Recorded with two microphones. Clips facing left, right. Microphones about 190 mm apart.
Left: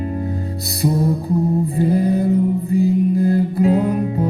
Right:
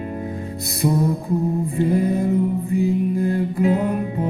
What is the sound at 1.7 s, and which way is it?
Mantra, 35° left (ahead or behind).